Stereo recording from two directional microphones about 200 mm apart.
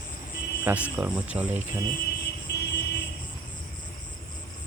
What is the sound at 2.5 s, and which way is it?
Vehicle, 55° left (ahead or behind).